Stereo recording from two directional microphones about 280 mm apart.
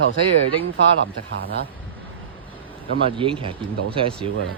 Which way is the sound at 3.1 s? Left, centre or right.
Centre.